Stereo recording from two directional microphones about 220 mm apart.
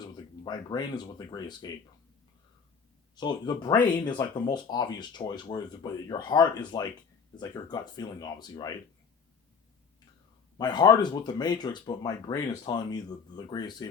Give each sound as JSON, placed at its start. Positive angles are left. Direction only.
{"t": 0.0, "sound": "speech", "side_deg": 20}
{"t": 3.2, "sound": "speech", "side_deg": 20}
{"t": 10.6, "sound": "speech", "side_deg": 20}